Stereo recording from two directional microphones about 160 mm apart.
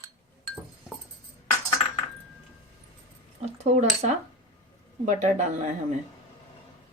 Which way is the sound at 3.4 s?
45° right (ahead or behind).